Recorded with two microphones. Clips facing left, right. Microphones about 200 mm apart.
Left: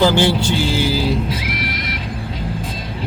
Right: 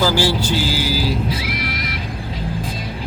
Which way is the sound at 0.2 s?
25° left (ahead or behind).